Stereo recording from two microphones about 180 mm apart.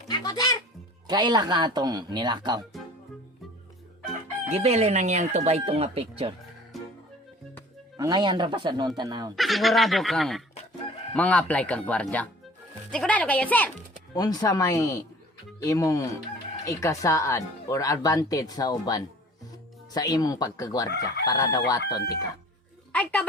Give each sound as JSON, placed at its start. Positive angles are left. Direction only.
{"t": 0.1, "sound": "speech", "side_deg": 20}
{"t": 1.0, "sound": "speech", "side_deg": -25}
{"t": 4.4, "sound": "speech", "side_deg": -35}
{"t": 6.7, "sound": "music", "side_deg": 0}
{"t": 7.9, "sound": "speech", "side_deg": -20}
{"t": 9.3, "sound": "speech", "side_deg": 0}
{"t": 14.1, "sound": "speech", "side_deg": 20}
{"t": 22.9, "sound": "a woman's voice", "side_deg": 5}